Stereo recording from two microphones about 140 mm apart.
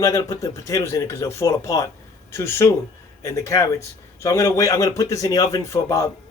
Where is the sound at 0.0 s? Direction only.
25° left (ahead or behind).